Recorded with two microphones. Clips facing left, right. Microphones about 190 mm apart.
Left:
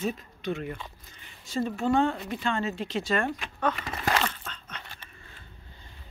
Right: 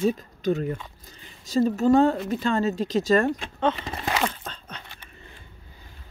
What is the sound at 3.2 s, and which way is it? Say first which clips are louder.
Speech: right 5 dB; 25° right (ahead or behind).